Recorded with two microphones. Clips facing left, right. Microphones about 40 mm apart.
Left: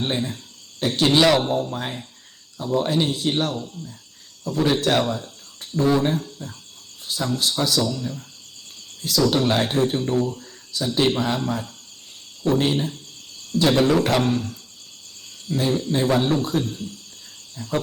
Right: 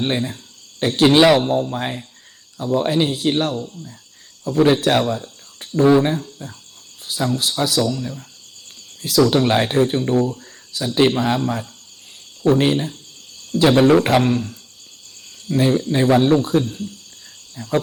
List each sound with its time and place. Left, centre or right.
0.0 s speech: centre
5.5 s speech: right
7.0 s cricket: centre
7.8 s speech: centre
9.2 s speech: right
15.4 s speech: right
17.5 s cricket: right